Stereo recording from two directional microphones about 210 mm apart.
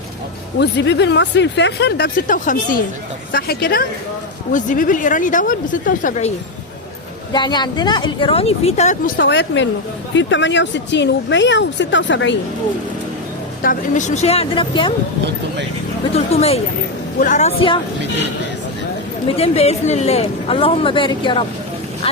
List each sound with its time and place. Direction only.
0.6 s a woman's voice: 55° left (ahead or behind); by 6.3 s 35° left (ahead or behind)
7.3 s speech: 20° left (ahead or behind)
9.1 s speech: 60° left (ahead or behind)
13.6 s speech: 40° left (ahead or behind); by 14.9 s 25° left (ahead or behind)
16.1 s a woman's voice: 30° left (ahead or behind)
19.4 s speech: 30° left (ahead or behind)